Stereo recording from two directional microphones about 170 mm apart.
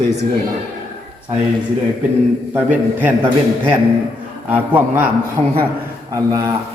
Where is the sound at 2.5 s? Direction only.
10° right (ahead or behind).